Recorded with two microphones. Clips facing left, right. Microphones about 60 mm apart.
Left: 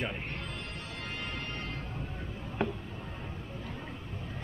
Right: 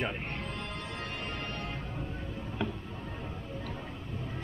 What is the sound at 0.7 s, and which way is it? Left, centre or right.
Music, right.